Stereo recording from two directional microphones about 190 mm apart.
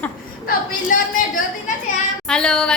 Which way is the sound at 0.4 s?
45° left (ahead or behind).